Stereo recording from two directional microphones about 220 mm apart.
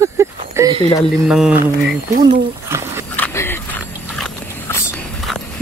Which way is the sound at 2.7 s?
10° right (ahead or behind).